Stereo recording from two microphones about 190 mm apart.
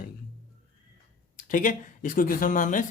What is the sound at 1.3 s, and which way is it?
Speech, 45° left (ahead or behind).